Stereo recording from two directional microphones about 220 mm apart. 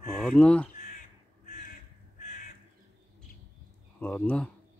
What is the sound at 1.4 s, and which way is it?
Crow, 35° left (ahead or behind).